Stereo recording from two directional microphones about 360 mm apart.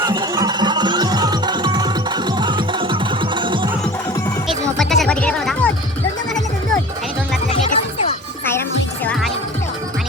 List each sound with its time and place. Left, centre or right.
0.0 s music: centre
4.4 s music: centre
7.5 s music: centre